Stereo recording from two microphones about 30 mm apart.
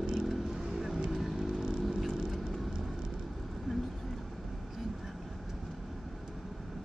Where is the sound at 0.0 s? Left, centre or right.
Right.